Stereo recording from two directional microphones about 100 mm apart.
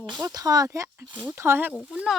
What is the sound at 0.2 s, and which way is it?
Speech, 40° right (ahead or behind).